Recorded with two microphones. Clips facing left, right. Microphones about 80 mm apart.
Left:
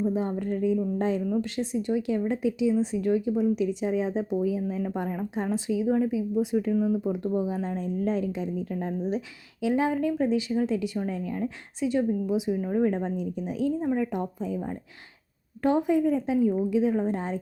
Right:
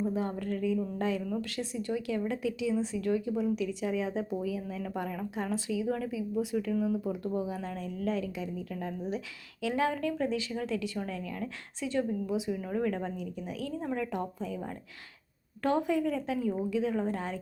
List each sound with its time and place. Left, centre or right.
0.0 s speech: left
9.6 s speech: centre
15.6 s speech: centre